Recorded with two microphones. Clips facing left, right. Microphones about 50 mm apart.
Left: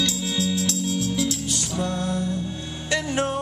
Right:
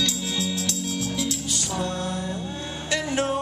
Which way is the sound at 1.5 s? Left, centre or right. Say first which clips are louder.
Left 1 dB; centre.